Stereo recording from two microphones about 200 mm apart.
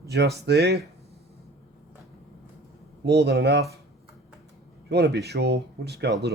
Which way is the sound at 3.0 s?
55° right (ahead or behind).